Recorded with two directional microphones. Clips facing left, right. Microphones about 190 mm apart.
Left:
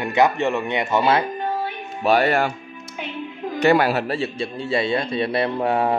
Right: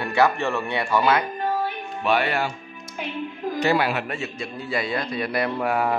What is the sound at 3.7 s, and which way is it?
Speech, 40° left (ahead or behind).